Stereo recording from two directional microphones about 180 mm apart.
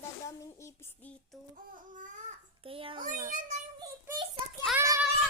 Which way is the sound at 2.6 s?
30° right (ahead or behind).